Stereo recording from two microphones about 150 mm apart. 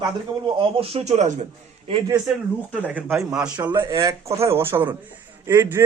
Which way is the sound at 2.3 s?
5° right (ahead or behind).